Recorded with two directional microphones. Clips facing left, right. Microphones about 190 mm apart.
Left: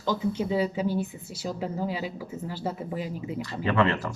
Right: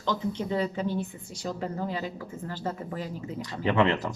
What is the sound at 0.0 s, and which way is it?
Speech, 10° left (ahead or behind).